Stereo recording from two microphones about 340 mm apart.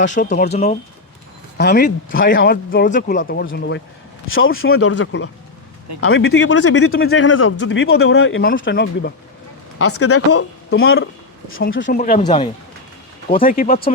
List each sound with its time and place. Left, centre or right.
0.0 s speech: left
9.7 s speech: left; by 12.5 s centre
13.2 s speech: left